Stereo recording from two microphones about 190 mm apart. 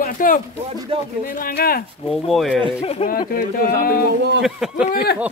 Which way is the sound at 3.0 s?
30° left (ahead or behind).